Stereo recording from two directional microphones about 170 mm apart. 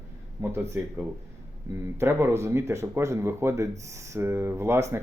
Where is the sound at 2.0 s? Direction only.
15° right (ahead or behind).